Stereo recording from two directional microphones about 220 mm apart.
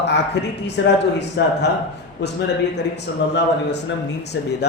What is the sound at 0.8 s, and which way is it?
Speech, 50° left (ahead or behind).